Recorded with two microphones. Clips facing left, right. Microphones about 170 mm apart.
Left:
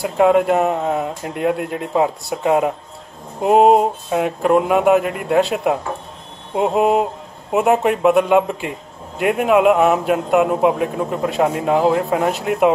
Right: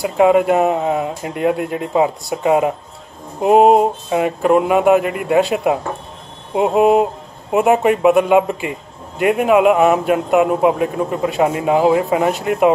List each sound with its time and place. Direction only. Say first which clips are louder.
0.0 s a man's voice: right 1 dB; centre (ahead or behind)